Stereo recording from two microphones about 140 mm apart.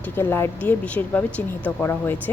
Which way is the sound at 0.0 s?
15° left (ahead or behind).